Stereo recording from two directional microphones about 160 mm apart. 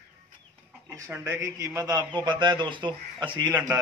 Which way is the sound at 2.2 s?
30° right (ahead or behind).